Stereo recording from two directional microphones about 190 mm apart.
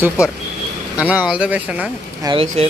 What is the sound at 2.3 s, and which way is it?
Speech, 30° right (ahead or behind).